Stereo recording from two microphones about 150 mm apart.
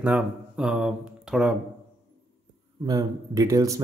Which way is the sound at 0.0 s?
5° right (ahead or behind).